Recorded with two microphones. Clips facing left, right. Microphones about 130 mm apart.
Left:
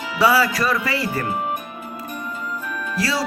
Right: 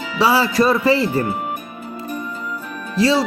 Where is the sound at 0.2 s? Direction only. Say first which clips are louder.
Right 2 dB; 25° right (ahead or behind).